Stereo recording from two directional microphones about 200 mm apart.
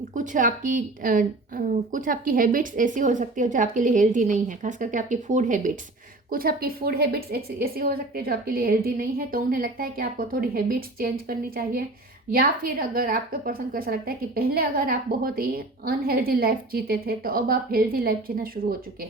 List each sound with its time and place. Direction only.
0.1 s a woman's voice: 40° right (ahead or behind)